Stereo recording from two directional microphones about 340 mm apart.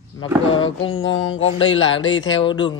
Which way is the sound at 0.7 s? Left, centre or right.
Left.